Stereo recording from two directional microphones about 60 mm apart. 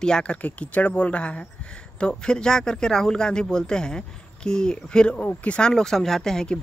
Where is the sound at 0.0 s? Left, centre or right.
Centre.